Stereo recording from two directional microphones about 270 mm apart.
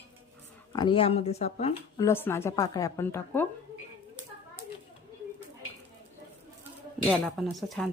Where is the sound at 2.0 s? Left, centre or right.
Centre.